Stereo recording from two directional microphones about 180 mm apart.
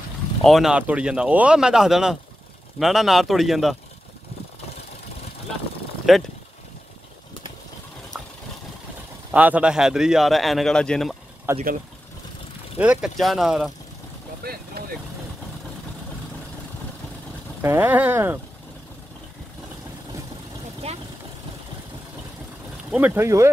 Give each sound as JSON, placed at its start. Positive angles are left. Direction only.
{"t": 0.4, "sound": "a man's voice", "side_deg": 0}
{"t": 6.1, "sound": "a man's voice", "side_deg": 0}
{"t": 9.3, "sound": "a man's voice", "side_deg": -10}
{"t": 11.5, "sound": "speech", "side_deg": -15}
{"t": 12.7, "sound": "a man's voice", "side_deg": -5}
{"t": 14.4, "sound": "vehicle", "side_deg": -60}
{"t": 17.6, "sound": "speech", "side_deg": -15}
{"t": 22.8, "sound": "speech", "side_deg": -10}